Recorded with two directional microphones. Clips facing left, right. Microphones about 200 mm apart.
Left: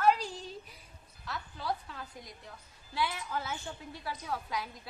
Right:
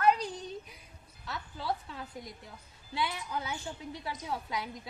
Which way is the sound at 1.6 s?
25° right (ahead or behind).